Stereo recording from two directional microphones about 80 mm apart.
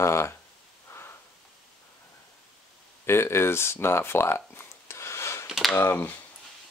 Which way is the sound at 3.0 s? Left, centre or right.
Left.